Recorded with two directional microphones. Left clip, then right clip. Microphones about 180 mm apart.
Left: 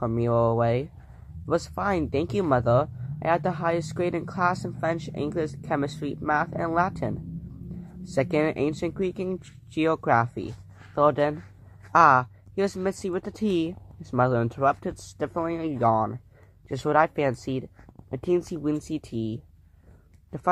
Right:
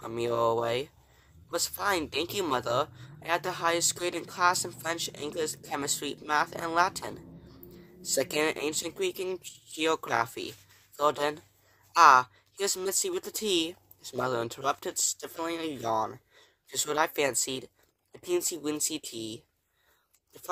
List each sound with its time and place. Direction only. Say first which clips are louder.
0.1 s speech: left 1 dB; 25° right (ahead or behind)